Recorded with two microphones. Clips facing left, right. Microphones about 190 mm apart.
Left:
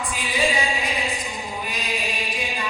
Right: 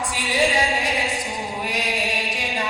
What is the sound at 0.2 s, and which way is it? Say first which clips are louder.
Music: right 3 dB; 80° right.